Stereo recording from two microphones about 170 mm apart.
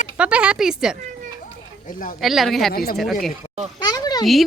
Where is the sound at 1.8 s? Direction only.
55° left (ahead or behind).